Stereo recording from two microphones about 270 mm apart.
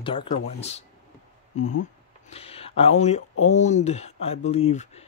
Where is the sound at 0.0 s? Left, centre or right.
Centre.